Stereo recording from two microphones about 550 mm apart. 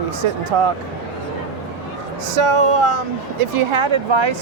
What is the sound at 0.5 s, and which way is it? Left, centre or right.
Speech, right.